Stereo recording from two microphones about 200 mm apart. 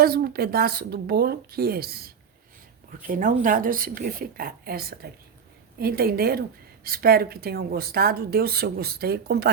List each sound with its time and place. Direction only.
0.0 s speech: 50° right (ahead or behind)